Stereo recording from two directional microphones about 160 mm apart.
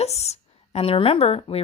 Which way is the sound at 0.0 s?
40° left (ahead or behind).